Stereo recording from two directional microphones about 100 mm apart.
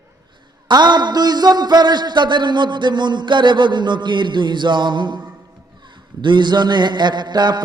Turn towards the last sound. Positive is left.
turn(degrees=-45)  # may be behind; listen again after turning